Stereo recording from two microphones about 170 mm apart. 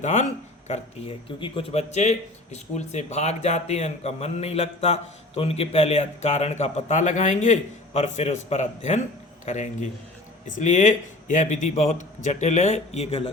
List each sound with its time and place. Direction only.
0.0 s a man's voice: 45° left (ahead or behind)
0.7 s a man's voice: 30° left (ahead or behind)